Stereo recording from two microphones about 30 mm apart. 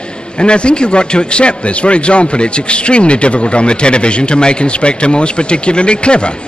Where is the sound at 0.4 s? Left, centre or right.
Left.